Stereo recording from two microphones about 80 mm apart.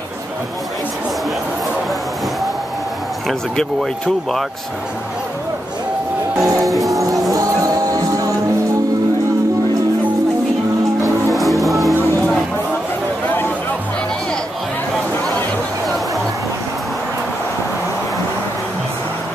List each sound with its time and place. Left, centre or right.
3.3 s speech: centre
6.4 s music: right
6.7 s music: centre
7.3 s music: right
11.3 s music: centre